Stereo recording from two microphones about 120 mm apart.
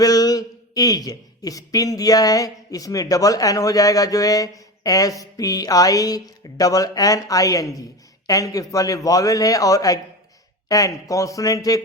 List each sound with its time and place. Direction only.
0.0 s speech: 30° left (ahead or behind)